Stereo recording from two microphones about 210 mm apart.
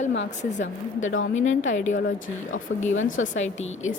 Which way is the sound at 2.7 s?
50° left (ahead or behind).